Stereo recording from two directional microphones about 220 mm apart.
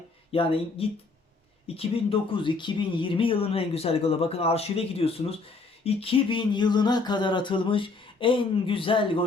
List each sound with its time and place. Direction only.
0.3 s speech: 25° left (ahead or behind)